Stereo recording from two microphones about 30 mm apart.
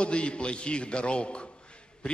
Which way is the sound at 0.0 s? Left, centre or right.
Left.